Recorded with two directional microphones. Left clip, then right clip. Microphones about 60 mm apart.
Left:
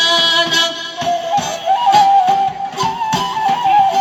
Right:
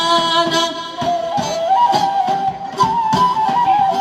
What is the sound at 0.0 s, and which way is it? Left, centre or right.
Music, right.